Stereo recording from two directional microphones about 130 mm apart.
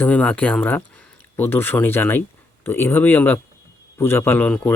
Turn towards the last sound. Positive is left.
turn(degrees=10)  # may be behind; listen again after turning